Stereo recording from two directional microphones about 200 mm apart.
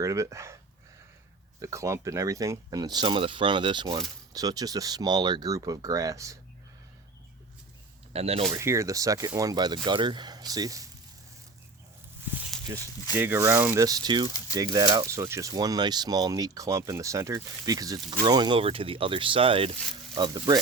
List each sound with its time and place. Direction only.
0.0 s speech: 15° right (ahead or behind)
8.1 s speech: 30° right (ahead or behind)
8.5 s speech: 15° right (ahead or behind)
12.3 s a sound: 5° right (ahead or behind)
13.1 s speech: 10° right (ahead or behind)